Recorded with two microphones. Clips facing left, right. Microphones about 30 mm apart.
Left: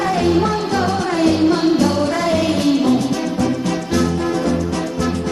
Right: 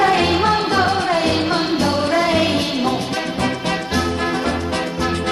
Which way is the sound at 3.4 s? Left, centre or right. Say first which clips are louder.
Even; right.